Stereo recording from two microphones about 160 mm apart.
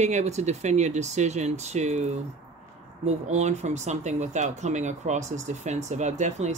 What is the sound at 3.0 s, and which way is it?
Speech, 45° right (ahead or behind).